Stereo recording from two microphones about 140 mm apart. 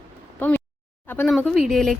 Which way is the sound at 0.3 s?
15° left (ahead or behind).